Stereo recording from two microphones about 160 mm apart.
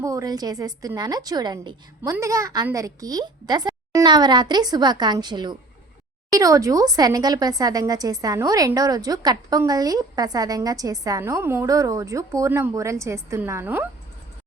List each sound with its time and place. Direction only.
0.0 s a woman's voice: 20° right (ahead or behind)